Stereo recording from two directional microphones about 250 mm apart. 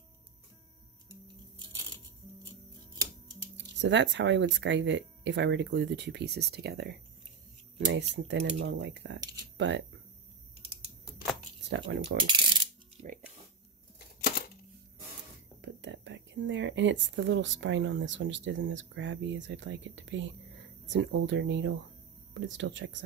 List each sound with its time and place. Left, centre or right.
3.5 s speech: right
9.2 s a sound: centre
9.6 s speech: right
11.7 s speech: right
12.2 s coin: centre
13.9 s a sound: left
15.6 s speech: right